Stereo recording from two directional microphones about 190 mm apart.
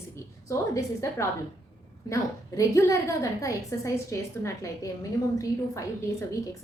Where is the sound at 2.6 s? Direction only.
15° left (ahead or behind).